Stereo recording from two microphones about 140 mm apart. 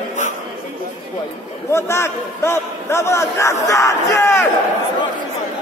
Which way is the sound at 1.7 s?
20° left (ahead or behind).